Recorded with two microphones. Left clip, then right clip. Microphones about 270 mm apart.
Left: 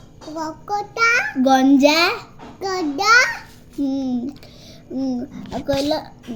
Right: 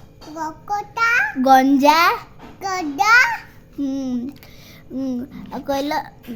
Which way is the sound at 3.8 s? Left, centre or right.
Right.